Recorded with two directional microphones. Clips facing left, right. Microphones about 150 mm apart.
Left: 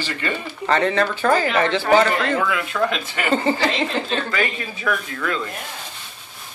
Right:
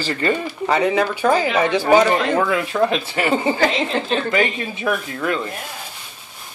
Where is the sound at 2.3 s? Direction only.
30° right (ahead or behind).